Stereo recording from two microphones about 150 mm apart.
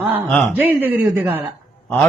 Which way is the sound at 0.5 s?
10° right (ahead or behind).